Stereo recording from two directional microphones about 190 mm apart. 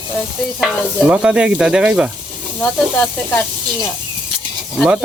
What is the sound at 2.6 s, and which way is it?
Speech, 10° left (ahead or behind).